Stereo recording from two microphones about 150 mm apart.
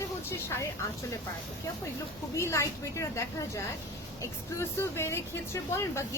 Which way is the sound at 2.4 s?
20° left (ahead or behind).